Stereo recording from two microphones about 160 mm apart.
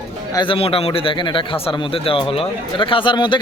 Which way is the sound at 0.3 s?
35° left (ahead or behind).